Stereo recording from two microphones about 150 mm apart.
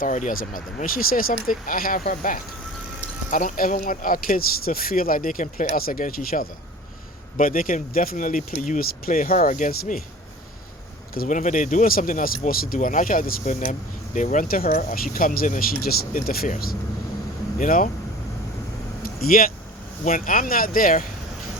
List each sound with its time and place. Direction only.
0.0 s speech: 55° left (ahead or behind)
8.1 s speech: 60° left (ahead or behind)
11.1 s speech: 65° left (ahead or behind)
13.5 s speech: 55° left (ahead or behind); by 16.7 s 80° left
17.6 s speech: 65° left (ahead or behind)
19.2 s speech: 70° left (ahead or behind)